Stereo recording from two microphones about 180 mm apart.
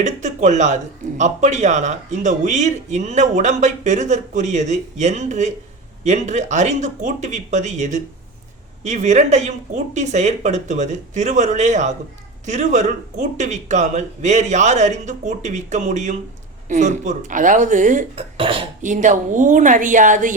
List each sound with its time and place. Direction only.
0.0 s speech: 40° right (ahead or behind)
18.3 s speech: 30° right (ahead or behind)
18.8 s speech: 45° right (ahead or behind)